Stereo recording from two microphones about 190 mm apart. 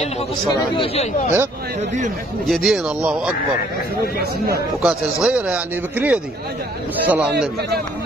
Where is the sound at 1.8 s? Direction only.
40° right (ahead or behind).